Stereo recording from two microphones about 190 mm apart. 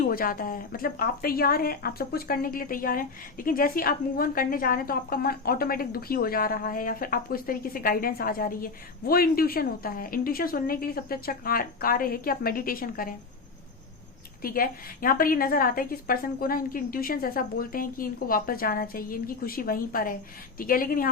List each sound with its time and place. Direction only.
0.0 s speech: 50° left (ahead or behind)
14.4 s speech: 50° left (ahead or behind)